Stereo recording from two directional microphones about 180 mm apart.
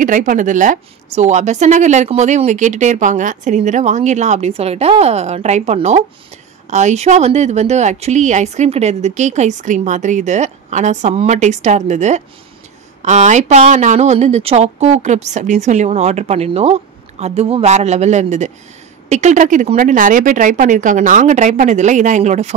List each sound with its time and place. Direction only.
0.0 s a woman's voice: 45° right (ahead or behind)